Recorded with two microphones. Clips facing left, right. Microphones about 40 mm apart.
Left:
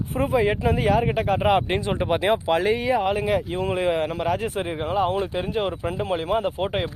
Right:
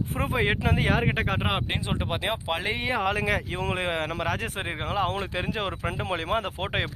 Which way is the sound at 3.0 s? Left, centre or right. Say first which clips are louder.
Left 3 dB; right.